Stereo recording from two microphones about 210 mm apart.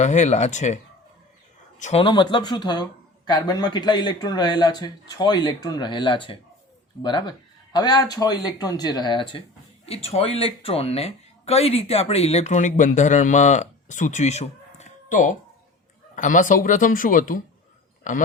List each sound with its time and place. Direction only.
0.0 s speech: 35° left (ahead or behind)
1.8 s speech: 30° left (ahead or behind)